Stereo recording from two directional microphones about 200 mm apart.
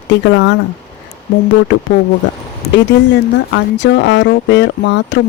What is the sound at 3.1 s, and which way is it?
Speech, 65° left (ahead or behind).